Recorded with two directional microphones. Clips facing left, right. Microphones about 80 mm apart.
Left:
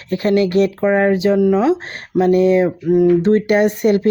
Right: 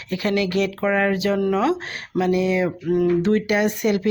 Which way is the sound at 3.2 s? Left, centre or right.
Left.